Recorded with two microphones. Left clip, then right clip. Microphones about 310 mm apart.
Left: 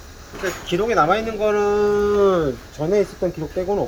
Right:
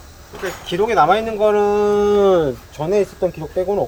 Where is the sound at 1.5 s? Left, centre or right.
Right.